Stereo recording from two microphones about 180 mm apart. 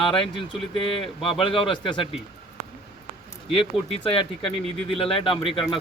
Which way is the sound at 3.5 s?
30° left (ahead or behind).